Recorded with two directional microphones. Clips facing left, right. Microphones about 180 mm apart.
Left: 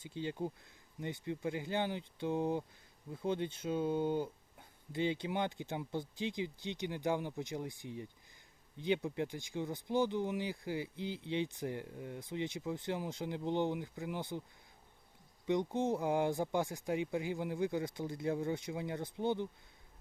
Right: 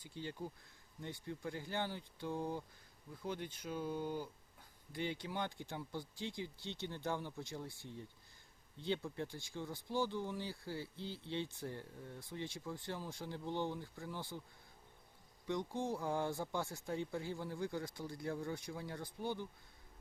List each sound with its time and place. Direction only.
0.0 s speech: 20° left (ahead or behind)
15.4 s speech: 20° left (ahead or behind)